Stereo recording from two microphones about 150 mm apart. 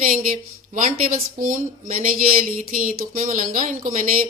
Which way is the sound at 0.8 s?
60° right (ahead or behind).